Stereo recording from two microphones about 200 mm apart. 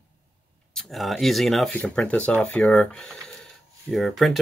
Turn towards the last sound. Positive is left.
turn(degrees=0)  # may be behind; listen again after turning